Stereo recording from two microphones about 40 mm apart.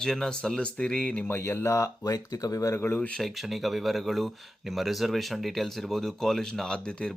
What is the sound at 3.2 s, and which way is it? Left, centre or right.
Speech, centre.